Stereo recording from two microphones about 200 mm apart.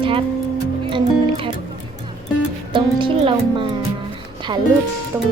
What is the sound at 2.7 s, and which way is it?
Speech, 25° right (ahead or behind).